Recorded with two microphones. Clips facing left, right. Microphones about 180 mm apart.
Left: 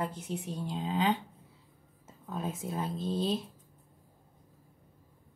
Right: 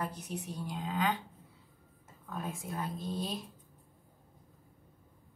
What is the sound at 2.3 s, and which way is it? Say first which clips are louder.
Speech: left 4 dB; 20° left (ahead or behind).